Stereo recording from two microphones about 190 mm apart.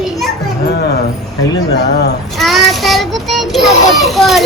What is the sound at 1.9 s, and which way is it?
Speech, 60° left (ahead or behind).